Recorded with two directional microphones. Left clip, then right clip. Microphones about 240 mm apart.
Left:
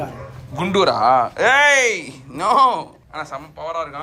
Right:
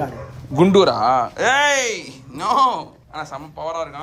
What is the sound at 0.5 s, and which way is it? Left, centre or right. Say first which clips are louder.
A man's voice: right 3 dB; centre.